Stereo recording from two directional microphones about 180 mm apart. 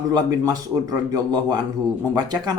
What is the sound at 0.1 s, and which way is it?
A man's voice, 20° right (ahead or behind).